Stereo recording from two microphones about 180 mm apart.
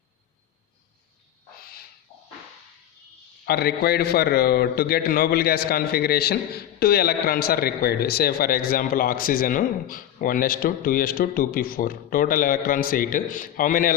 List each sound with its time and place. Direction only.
3.4 s a man's voice: 60° left (ahead or behind)